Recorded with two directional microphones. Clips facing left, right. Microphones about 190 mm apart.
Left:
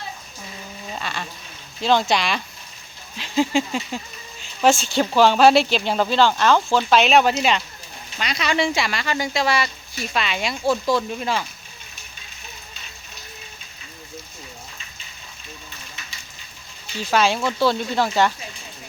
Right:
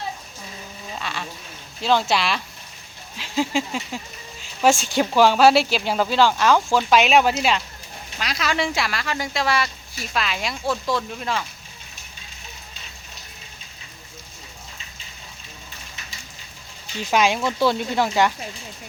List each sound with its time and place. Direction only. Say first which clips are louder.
0.9 s a sound: even; centre (ahead or behind)
1.8 s speech: left 1 dB; 5° right (ahead or behind)
4.6 s speech: left 1 dB; 15° right (ahead or behind)
17.0 s speech: even; 15° right (ahead or behind)